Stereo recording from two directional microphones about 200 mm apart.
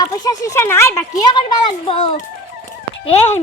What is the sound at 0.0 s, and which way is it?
A child's voice, 20° left (ahead or behind).